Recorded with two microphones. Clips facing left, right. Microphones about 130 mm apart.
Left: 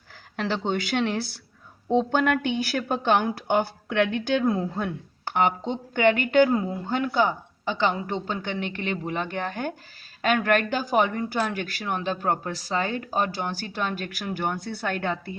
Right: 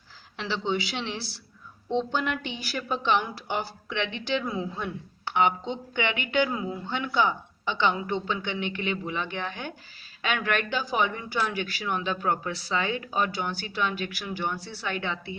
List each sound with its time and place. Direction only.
0.3 s a woman's voice: 45° left (ahead or behind)